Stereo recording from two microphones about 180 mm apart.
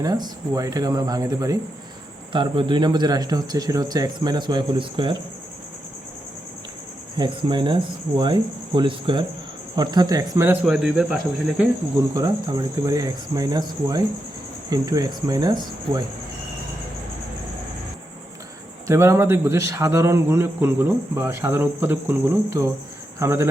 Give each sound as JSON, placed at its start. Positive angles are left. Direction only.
{"t": 0.0, "sound": "a man's voice", "side_deg": -20}
{"t": 7.2, "sound": "a man's voice", "side_deg": -25}
{"t": 12.1, "sound": "a man's voice", "side_deg": -20}
{"t": 18.9, "sound": "a man's voice", "side_deg": -15}